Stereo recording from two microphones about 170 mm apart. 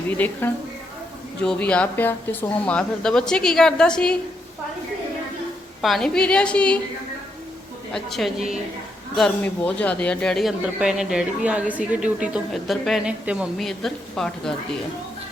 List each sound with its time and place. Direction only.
0.2 s a woman's voice: 10° left (ahead or behind)
5.8 s speech: centre (ahead or behind)
7.9 s speech: centre (ahead or behind)